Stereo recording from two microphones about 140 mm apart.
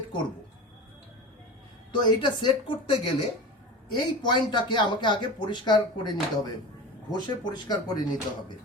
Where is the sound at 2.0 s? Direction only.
35° left (ahead or behind).